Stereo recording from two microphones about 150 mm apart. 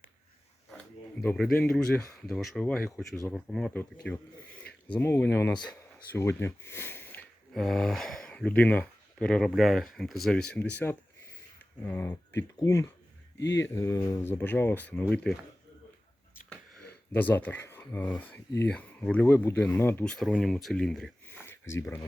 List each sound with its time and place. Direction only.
1.6 s speech: 5° left (ahead or behind)
7.5 s speech: centre (ahead or behind)
16.5 s speech: 5° left (ahead or behind)
20.1 s speech: centre (ahead or behind)
21.2 s a sound: 15° left (ahead or behind)